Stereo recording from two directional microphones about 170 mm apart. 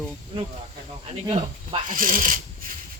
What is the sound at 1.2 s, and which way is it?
Speech, 25° right (ahead or behind).